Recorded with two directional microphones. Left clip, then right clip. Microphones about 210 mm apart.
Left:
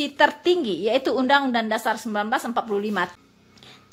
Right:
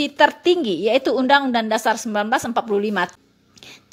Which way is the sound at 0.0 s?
25° right (ahead or behind).